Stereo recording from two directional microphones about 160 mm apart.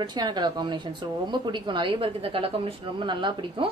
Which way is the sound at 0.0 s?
25° right (ahead or behind).